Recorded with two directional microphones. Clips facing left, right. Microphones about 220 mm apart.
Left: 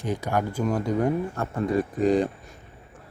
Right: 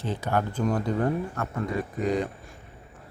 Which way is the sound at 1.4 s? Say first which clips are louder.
Left 5 dB; 30° left (ahead or behind).